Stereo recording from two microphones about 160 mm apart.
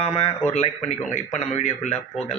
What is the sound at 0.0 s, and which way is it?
A man's voice, 40° left (ahead or behind).